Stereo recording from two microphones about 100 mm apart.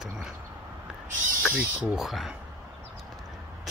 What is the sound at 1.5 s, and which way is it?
Speech, 10° right (ahead or behind).